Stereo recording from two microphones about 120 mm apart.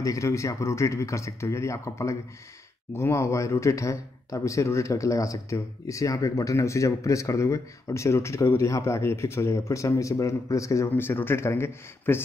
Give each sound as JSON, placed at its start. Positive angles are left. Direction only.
{"t": 0.0, "sound": "speech", "side_deg": 25}